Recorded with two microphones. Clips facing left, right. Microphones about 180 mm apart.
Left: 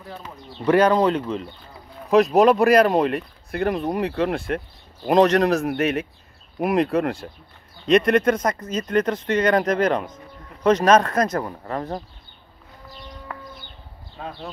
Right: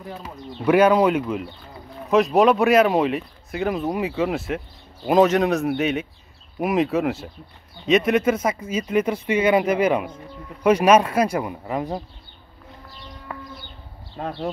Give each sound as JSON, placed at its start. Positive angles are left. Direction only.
{"t": 0.7, "sound": "speech", "side_deg": -10}
{"t": 14.1, "sound": "speech", "side_deg": -45}